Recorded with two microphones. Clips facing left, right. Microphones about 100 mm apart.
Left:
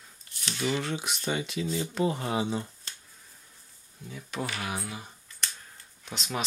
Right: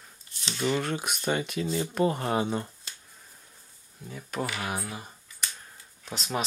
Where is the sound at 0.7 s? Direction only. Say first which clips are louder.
Right 2 dB; 50° right (ahead or behind).